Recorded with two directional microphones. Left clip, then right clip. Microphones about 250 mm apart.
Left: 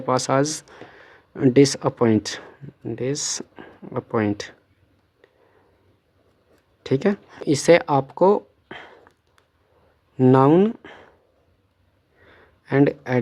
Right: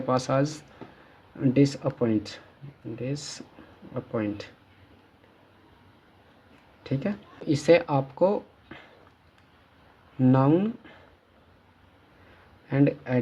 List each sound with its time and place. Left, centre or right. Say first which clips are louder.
0.0 s speech: left 5 dB; left
6.8 s speech: left 10 dB; left
10.2 s speech: left 8 dB; left
12.6 s speech: left 6 dB; left